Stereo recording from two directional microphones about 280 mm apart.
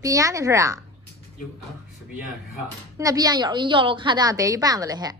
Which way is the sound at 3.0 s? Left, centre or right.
Centre.